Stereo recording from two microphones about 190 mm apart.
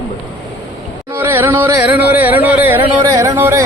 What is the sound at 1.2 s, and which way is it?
Speech, 10° right (ahead or behind).